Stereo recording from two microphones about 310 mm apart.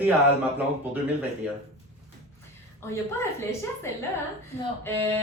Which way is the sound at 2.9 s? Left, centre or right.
Centre.